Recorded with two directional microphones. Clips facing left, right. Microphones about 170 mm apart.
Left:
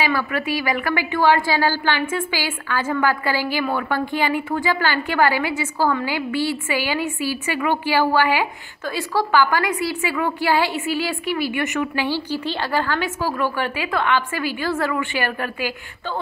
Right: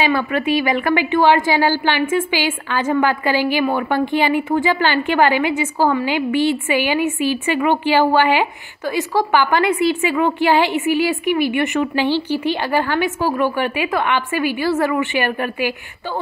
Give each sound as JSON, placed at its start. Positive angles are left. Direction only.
{"t": 0.0, "sound": "a woman's voice", "side_deg": -25}
{"t": 12.4, "sound": "a woman's voice", "side_deg": -15}